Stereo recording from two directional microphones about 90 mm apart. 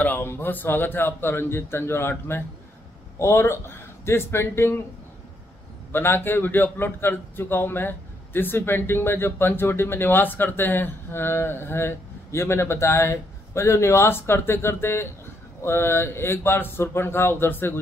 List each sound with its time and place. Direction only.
0.0 s a man's voice: 25° left (ahead or behind)
5.9 s a man's voice: 25° left (ahead or behind)